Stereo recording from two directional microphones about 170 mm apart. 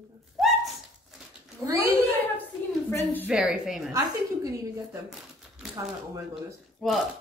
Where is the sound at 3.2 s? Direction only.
5° right (ahead or behind).